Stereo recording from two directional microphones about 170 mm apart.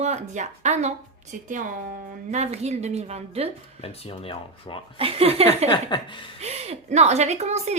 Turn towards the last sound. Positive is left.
turn(degrees=-40)  # may be behind; listen again after turning